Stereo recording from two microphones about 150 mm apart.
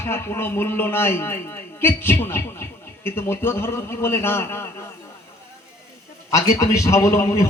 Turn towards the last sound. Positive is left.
turn(degrees=20)  # may be behind; listen again after turning